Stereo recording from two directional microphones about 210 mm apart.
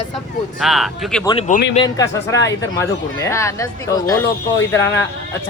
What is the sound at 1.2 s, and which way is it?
Speech, 20° left (ahead or behind).